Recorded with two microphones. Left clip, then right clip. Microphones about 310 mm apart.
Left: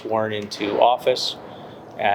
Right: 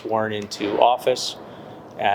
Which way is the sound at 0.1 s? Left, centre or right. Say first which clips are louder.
Even; right.